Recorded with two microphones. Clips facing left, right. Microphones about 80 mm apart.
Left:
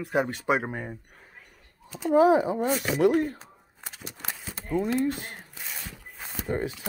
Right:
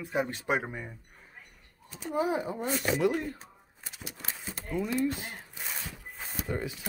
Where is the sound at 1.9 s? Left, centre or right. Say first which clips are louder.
Left 10 dB; left.